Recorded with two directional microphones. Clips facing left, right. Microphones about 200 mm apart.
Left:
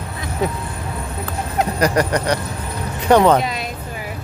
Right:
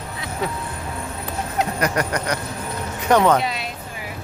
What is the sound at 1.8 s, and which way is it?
Speech, 35° left (ahead or behind).